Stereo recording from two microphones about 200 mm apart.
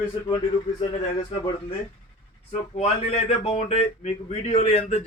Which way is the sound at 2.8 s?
35° left (ahead or behind).